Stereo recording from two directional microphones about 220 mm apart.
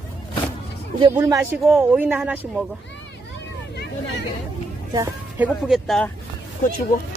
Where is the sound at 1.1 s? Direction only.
10° right (ahead or behind).